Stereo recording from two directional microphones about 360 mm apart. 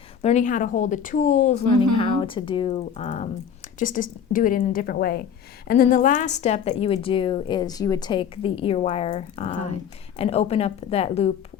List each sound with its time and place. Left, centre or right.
0.2 s speech: centre
1.7 s a woman's voice: right
2.0 s a woman's voice: centre